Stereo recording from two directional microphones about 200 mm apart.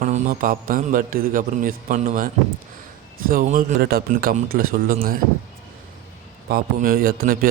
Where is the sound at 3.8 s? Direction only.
50° right (ahead or behind).